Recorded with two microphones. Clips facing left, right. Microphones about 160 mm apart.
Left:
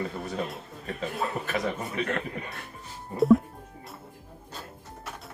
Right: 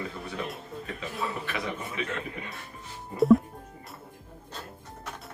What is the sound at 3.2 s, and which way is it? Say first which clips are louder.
Speech: even; centre (ahead or behind).